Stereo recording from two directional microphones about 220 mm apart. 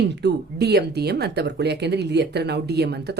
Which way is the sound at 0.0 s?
50° right (ahead or behind).